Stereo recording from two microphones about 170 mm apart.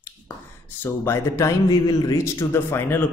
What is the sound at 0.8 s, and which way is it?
Speech, 15° left (ahead or behind).